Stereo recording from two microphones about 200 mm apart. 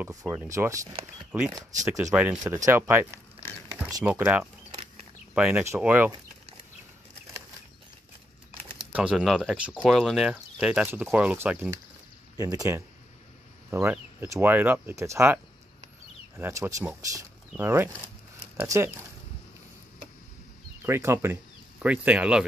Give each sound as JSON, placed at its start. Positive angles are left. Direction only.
{"t": 0.0, "sound": "speech", "side_deg": -15}
{"t": 8.9, "sound": "speech", "side_deg": -5}
{"t": 20.8, "sound": "speech", "side_deg": -10}